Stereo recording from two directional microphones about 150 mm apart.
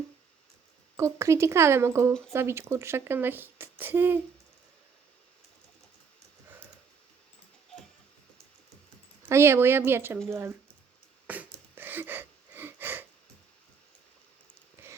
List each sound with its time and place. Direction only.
0.9 s speech: 20° right (ahead or behind)
9.3 s speech: 15° right (ahead or behind)
11.3 s a sound: 10° right (ahead or behind)